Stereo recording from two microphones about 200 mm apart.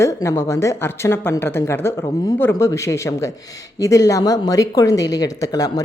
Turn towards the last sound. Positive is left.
turn(degrees=20)  # may be behind; listen again after turning